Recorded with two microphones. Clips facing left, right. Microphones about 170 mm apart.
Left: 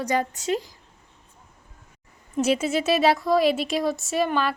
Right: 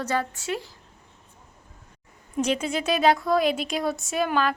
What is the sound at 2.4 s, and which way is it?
A woman's voice, 5° left (ahead or behind).